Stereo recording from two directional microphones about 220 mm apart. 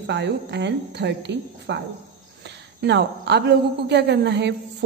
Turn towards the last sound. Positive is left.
turn(degrees=-50)  # may be behind; listen again after turning